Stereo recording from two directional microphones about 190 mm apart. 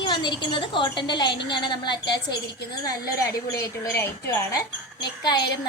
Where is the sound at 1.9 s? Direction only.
60° left (ahead or behind).